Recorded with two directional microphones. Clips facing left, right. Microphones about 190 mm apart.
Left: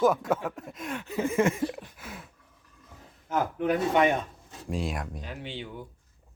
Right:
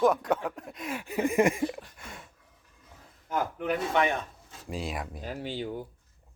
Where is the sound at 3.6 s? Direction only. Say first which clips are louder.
Left 4 dB; 15° left (ahead or behind).